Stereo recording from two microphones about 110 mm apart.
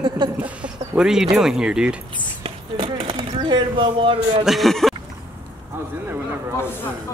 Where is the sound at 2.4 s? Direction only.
60° right (ahead or behind).